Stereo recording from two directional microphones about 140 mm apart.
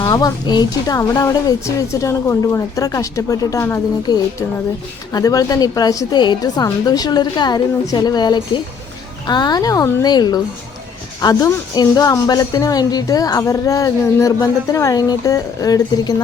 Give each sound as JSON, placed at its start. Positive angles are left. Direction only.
{"t": 0.0, "sound": "speech", "side_deg": 25}